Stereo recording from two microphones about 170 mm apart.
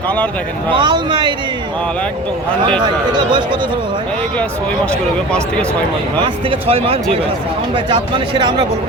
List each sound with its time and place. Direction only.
0.7 s speech: 25° right (ahead or behind)
2.8 s speech: 25° right (ahead or behind)
6.2 s speech: 30° right (ahead or behind)